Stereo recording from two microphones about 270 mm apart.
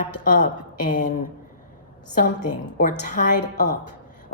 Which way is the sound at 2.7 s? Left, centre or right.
Left.